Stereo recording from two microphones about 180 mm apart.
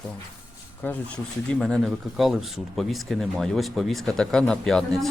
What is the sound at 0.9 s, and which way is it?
Speech, 5° left (ahead or behind).